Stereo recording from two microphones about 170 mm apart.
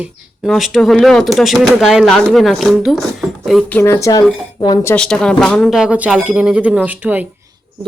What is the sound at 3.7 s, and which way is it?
Speech, 15° left (ahead or behind).